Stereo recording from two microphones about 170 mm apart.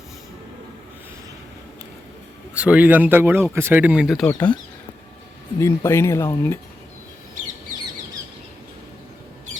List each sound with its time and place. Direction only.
2.6 s speech: 5° right (ahead or behind)
5.5 s speech: 15° left (ahead or behind)